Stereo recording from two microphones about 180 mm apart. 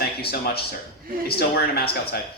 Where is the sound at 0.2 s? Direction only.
60° left (ahead or behind).